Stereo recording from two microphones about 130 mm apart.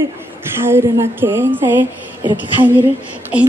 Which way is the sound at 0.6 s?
20° right (ahead or behind).